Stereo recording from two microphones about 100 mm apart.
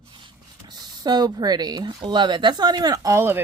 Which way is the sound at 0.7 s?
45° right (ahead or behind).